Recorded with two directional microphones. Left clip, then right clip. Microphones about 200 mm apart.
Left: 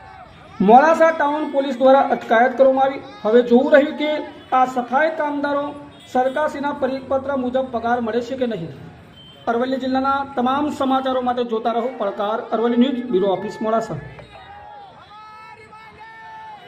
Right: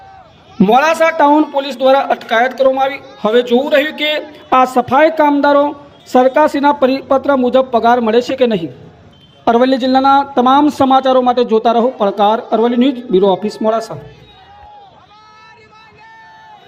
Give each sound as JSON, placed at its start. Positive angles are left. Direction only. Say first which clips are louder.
{"t": 0.6, "sound": "speech", "louder": "right 2 dB", "side_deg": -35}